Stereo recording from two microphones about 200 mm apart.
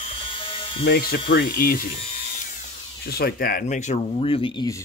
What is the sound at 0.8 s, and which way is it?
Speech, 50° left (ahead or behind).